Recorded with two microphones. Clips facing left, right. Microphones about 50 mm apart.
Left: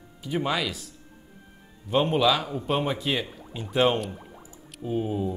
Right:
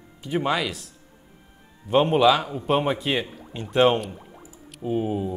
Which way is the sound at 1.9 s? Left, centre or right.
Centre.